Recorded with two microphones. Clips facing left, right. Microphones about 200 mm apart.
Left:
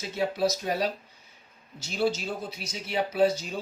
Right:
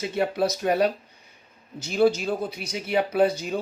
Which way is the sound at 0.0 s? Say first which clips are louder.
Right 3 dB; 60° right (ahead or behind).